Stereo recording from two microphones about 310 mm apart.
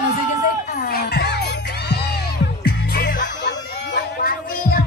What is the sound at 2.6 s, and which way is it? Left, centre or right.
Music, left.